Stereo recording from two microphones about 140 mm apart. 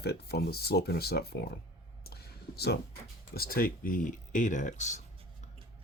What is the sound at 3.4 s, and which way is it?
Speech, 90° left.